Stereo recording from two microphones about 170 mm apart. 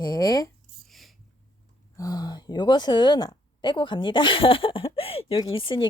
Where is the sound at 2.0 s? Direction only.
20° left (ahead or behind).